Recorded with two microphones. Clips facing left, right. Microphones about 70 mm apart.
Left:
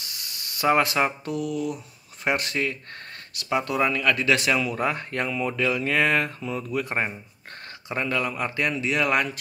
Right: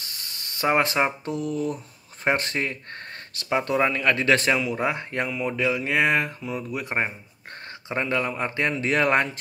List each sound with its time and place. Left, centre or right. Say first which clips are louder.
0.2 s spray: right 1 dB; right
0.7 s speech: left 1 dB; right
4.6 s speech: even; centre